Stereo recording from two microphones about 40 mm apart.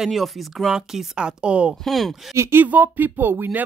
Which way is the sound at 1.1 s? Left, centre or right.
Right.